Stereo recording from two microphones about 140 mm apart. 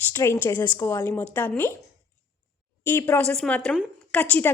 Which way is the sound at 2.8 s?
15° left (ahead or behind).